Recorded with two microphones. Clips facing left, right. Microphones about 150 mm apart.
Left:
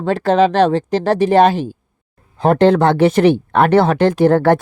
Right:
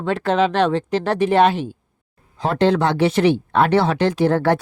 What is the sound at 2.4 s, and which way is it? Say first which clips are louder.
Speech: left 6 dB; 50° left (ahead or behind).